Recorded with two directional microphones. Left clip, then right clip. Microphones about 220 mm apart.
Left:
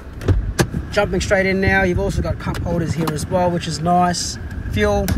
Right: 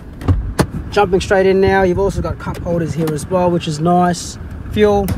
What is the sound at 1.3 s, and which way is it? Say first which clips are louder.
Speech: right 2 dB; 65° right (ahead or behind).